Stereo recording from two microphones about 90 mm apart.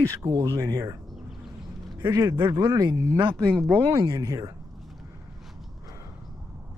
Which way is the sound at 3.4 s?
10° left (ahead or behind).